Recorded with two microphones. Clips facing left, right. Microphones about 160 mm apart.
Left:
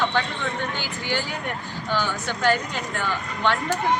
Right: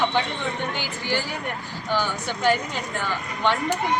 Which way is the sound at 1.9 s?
15° right (ahead or behind).